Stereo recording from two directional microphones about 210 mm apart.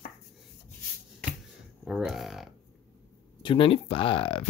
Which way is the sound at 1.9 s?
Centre (ahead or behind).